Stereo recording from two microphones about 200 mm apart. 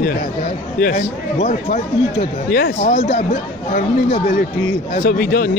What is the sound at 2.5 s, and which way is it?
Speech, 50° left (ahead or behind).